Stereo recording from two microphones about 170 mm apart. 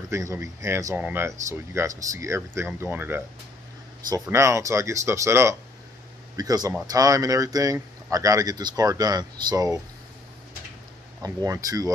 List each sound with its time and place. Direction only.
0.1 s speech: 20° right (ahead or behind)
11.2 s speech: 20° right (ahead or behind)